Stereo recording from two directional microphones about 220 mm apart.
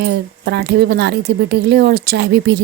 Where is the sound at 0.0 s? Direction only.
50° right (ahead or behind).